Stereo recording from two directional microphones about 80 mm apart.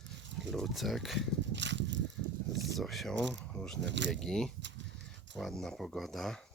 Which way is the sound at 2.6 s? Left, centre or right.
Centre.